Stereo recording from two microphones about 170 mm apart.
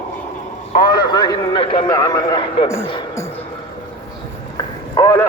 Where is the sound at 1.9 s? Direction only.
20° left (ahead or behind).